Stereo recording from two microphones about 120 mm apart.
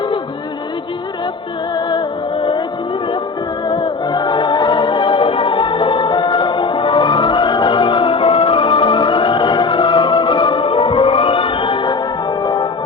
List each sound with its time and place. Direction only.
1.7 s music: 40° left (ahead or behind)
3.7 s music: 40° left (ahead or behind)